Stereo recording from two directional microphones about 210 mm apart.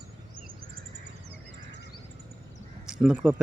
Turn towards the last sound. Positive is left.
turn(degrees=-10)  # may be behind; listen again after turning